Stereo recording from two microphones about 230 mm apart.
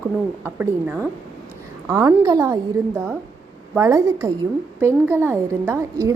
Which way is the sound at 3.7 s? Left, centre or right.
Centre.